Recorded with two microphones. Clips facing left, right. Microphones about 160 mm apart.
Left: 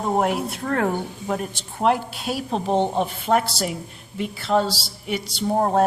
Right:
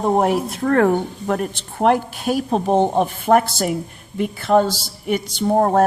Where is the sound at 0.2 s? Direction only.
40° right (ahead or behind).